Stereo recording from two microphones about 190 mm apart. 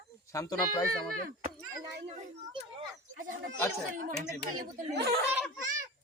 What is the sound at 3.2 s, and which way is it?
Speech, 45° right (ahead or behind).